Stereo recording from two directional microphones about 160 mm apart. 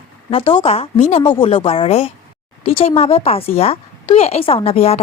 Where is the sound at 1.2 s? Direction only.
30° left (ahead or behind).